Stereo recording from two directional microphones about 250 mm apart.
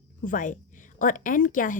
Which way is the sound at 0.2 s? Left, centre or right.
Left.